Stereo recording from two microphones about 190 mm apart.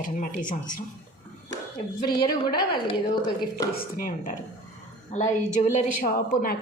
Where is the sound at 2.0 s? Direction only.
20° left (ahead or behind).